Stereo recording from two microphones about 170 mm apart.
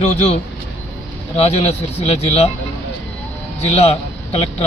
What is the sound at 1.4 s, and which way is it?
A man's voice, 35° left (ahead or behind).